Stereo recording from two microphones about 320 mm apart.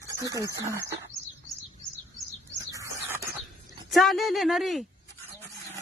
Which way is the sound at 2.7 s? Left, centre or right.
Centre.